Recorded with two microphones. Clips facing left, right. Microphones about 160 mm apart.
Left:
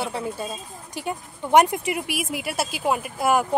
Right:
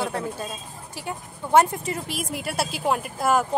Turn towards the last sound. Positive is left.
turn(degrees=5)  # may be behind; listen again after turning